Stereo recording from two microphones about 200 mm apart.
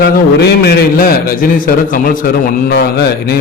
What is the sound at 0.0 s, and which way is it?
A man's voice, 50° left (ahead or behind).